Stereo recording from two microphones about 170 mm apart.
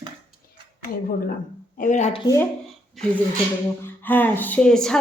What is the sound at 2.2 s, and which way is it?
Speech, 20° left (ahead or behind).